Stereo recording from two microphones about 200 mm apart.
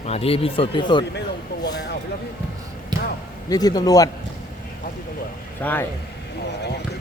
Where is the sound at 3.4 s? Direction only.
20° left (ahead or behind).